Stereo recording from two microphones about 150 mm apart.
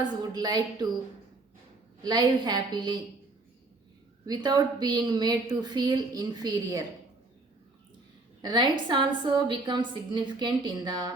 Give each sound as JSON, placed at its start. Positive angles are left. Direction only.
{"t": 0.0, "sound": "a woman's voice", "side_deg": -25}
{"t": 2.0, "sound": "a woman's voice", "side_deg": -25}
{"t": 4.3, "sound": "a woman's voice", "side_deg": -25}
{"t": 8.4, "sound": "a woman's voice", "side_deg": -30}